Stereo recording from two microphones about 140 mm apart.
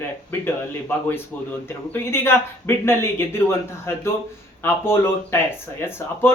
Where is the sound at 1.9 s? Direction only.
15° left (ahead or behind).